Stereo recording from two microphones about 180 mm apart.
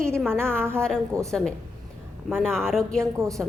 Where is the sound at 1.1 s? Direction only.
15° right (ahead or behind).